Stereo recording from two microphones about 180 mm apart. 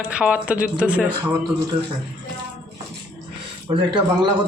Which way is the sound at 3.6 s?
25° right (ahead or behind).